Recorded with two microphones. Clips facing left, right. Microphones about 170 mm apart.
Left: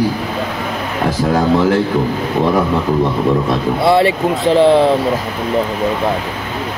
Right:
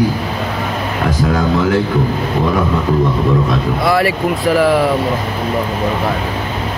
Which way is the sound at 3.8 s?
25° left (ahead or behind).